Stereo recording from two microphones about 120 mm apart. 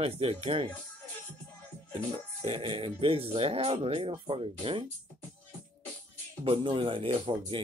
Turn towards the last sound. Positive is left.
turn(degrees=-45)  # may be behind; listen again after turning